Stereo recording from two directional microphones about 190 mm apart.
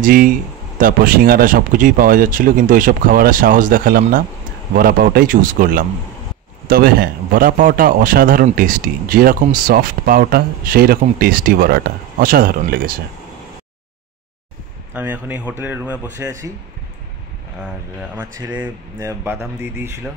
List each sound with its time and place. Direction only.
0.0 s a man's voice: 50° right (ahead or behind)
15.0 s a man's voice: 10° right (ahead or behind)
18.1 s a man's voice: 10° right (ahead or behind)